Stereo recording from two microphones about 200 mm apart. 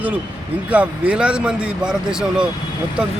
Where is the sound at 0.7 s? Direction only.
5° right (ahead or behind).